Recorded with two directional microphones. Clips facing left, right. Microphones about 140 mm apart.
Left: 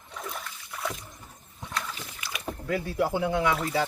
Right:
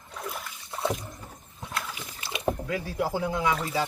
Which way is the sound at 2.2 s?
25° right (ahead or behind).